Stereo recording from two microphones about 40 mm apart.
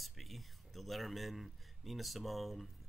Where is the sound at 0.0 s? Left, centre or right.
Centre.